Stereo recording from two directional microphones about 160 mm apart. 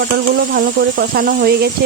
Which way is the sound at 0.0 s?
90° right.